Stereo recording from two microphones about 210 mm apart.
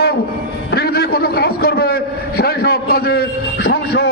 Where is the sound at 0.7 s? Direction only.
50° left (ahead or behind).